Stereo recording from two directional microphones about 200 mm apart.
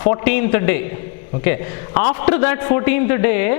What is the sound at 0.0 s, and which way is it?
A man's voice, 15° left (ahead or behind).